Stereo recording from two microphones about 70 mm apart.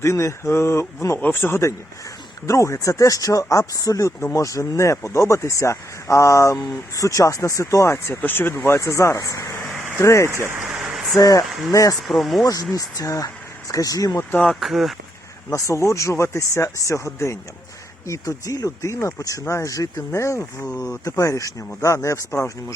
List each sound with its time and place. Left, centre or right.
0.0 s speech: left
2.5 s speech: left
10.2 s speech: right
10.7 s a sound: centre
11.2 s speech: left
11.9 s speech: centre
12.5 s speech: left
14.4 s speech: centre
15.5 s speech: left